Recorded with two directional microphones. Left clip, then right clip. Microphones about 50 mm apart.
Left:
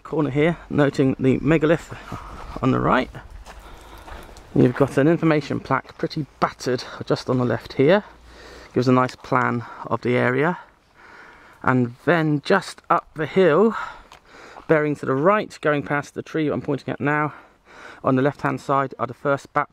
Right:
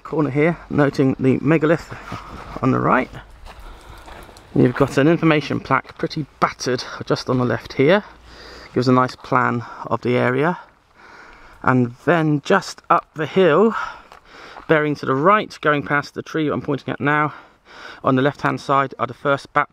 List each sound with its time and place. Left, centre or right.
0.0 s speech: centre
2.0 s a sound: right
2.8 s speech: centre
4.1 s a sound: centre
5.4 s speech: right; by 9.2 s centre
9.2 s speech: right
11.7 s speech: right; by 15.3 s centre
15.3 s speech: right